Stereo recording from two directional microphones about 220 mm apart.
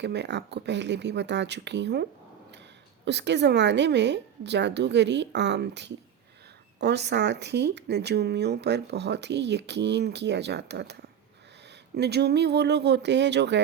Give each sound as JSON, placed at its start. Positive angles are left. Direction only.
{"t": 0.0, "sound": "speech", "side_deg": -50}
{"t": 11.9, "sound": "speech", "side_deg": -50}